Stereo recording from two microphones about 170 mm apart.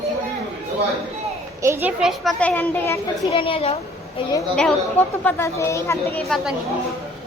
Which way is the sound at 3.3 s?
35° left (ahead or behind).